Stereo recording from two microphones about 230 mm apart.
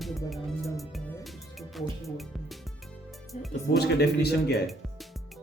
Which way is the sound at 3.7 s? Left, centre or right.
Left.